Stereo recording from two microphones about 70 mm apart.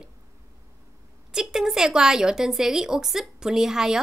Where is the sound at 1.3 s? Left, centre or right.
Centre.